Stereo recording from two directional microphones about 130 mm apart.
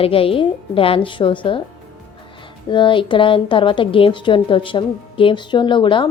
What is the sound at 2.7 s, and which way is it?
A woman's voice, 40° left (ahead or behind).